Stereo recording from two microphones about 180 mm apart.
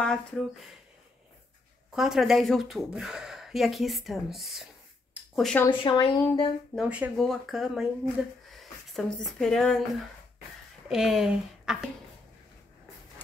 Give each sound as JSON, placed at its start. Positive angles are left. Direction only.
{"t": 0.0, "sound": "speech", "side_deg": 5}
{"t": 2.0, "sound": "speech", "side_deg": 0}
{"t": 5.7, "sound": "speech", "side_deg": 25}
{"t": 6.7, "sound": "speech", "side_deg": -5}
{"t": 10.9, "sound": "speech", "side_deg": 0}